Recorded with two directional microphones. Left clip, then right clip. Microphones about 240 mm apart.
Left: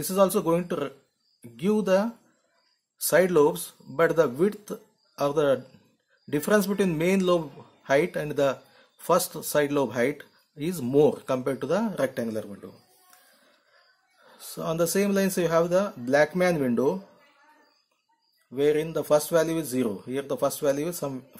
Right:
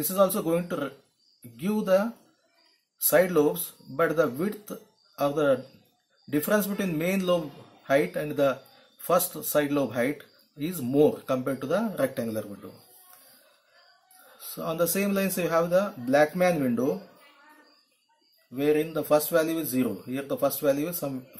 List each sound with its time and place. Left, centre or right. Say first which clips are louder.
0.0 s speech: left 1 dB; left
14.4 s speech: left 1 dB; left
18.5 s speech: left 1 dB; left